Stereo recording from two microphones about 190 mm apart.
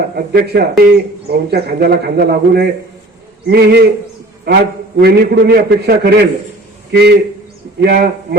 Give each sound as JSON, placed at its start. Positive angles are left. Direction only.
{"t": 0.3, "sound": "speech", "side_deg": -55}